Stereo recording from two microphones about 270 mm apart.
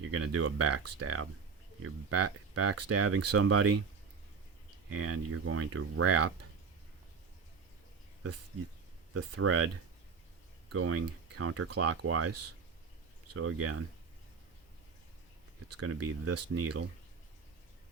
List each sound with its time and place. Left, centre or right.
0.1 s speech: right
4.9 s speech: right
9.1 s speech: right
10.7 s speech: right
15.7 s speech: right